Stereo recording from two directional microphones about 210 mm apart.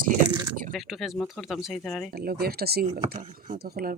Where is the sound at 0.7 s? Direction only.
Centre (ahead or behind).